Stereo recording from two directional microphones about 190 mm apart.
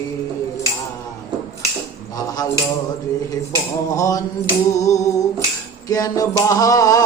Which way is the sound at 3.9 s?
20° left (ahead or behind).